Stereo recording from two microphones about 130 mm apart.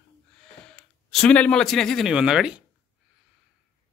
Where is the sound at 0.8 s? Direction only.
5° left (ahead or behind).